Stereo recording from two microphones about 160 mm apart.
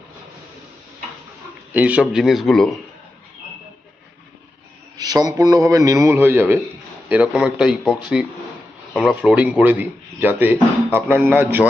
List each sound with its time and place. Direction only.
1.7 s a man's voice: 10° right (ahead or behind)
4.9 s a man's voice: 25° right (ahead or behind)